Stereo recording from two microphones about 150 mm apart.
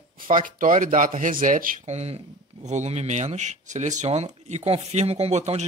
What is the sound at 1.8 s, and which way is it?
Speech, 45° right (ahead or behind).